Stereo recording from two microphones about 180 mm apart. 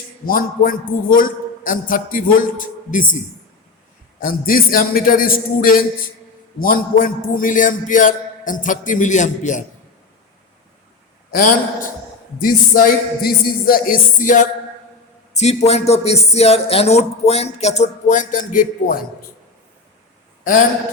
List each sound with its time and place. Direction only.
0.3 s a man's voice: 50° left (ahead or behind)
4.2 s a man's voice: 55° left (ahead or behind)
11.3 s a man's voice: 50° left (ahead or behind)
20.4 s a man's voice: 45° left (ahead or behind)